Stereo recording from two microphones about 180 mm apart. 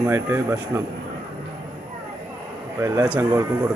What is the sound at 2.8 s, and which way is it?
Speech, 10° right (ahead or behind).